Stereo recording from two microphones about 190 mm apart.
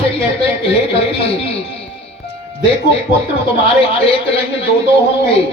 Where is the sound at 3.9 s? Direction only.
30° left (ahead or behind).